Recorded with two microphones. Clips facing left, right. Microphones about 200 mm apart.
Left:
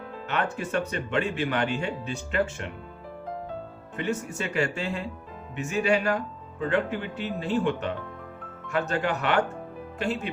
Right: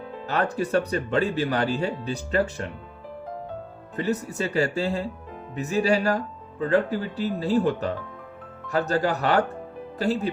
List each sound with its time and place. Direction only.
0.3 s speech: 35° right (ahead or behind)
3.9 s speech: 35° right (ahead or behind)